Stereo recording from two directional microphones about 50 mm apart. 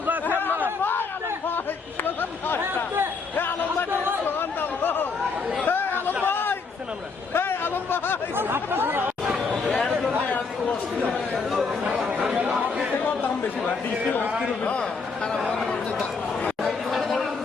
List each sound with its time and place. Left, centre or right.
0.8 s chatter: left
2.0 s a sound: left
3.3 s basketball bounce: left
4.3 s chatter: left
7.3 s a sound: left
8.4 s chatter: right
9.5 s chatter: centre
11.9 s chatter: right
13.7 s speech: left
14.6 s a sound: left
15.5 s a sound: centre
16.6 s chatter: centre